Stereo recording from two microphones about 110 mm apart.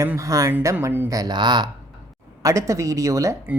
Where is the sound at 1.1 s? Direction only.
35° right (ahead or behind).